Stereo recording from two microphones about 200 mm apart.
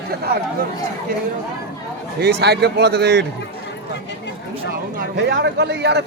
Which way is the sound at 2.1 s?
55° right (ahead or behind).